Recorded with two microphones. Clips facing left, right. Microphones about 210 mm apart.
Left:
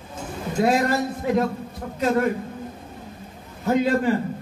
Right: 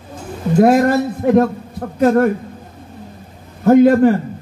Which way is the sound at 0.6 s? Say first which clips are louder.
Right 8 dB; 55° right (ahead or behind).